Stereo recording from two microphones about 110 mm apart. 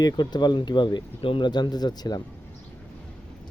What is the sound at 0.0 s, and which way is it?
Speech, 40° left (ahead or behind).